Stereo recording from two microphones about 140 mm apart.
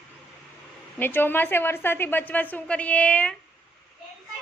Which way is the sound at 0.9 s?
15° left (ahead or behind).